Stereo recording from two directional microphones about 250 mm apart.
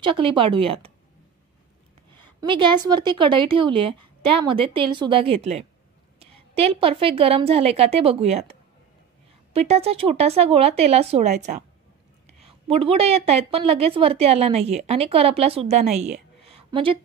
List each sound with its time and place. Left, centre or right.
0.0 s a woman's voice: centre
2.4 s a woman's voice: centre
16.4 s a sound: right